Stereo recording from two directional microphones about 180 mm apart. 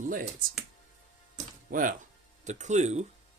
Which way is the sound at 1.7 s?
50° right (ahead or behind).